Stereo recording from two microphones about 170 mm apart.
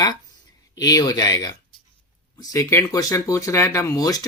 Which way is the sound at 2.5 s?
15° left (ahead or behind).